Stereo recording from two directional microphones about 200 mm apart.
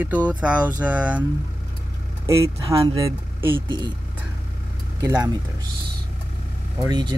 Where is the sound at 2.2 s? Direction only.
15° right (ahead or behind).